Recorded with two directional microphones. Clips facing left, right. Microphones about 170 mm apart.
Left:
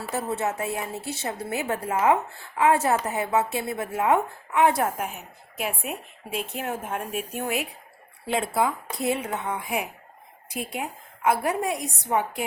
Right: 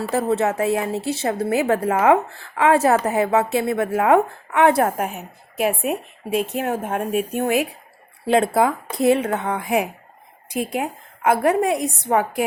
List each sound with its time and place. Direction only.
0.1 s a woman's voice: 85° right
2.9 s speech: 80° right
4.8 s a woman's voice: 65° right (ahead or behind)
5.8 s a woman's voice: 15° right (ahead or behind)
6.6 s speech: 70° right (ahead or behind)
6.8 s speech: 45° right (ahead or behind)
7.1 s a woman's voice: 70° right (ahead or behind)
12.1 s a woman's voice: 90° right